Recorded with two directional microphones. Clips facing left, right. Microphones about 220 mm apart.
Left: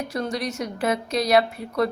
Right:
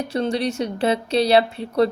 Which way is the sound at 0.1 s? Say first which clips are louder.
Right 5 dB; 30° right (ahead or behind).